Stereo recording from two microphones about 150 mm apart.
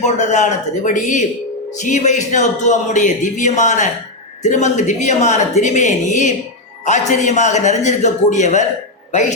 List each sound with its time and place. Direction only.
0.0 s a man's voice: 50° left (ahead or behind)